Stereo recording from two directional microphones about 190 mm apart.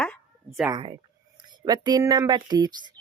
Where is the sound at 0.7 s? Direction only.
25° right (ahead or behind).